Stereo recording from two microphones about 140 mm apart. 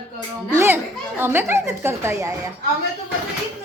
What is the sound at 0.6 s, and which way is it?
A woman's voice, 15° right (ahead or behind).